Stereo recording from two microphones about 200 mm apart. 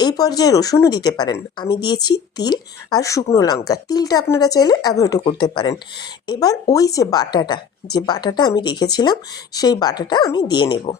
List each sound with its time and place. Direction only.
0.0 s speech: 20° left (ahead or behind)